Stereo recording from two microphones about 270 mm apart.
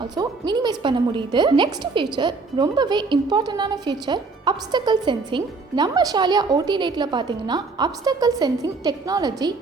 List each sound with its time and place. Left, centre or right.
0.0 s speech: centre